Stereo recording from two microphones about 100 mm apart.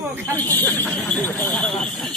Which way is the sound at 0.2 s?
15° left (ahead or behind).